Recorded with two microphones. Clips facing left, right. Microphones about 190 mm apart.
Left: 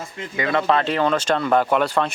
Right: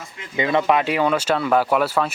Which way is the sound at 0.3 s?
20° right (ahead or behind).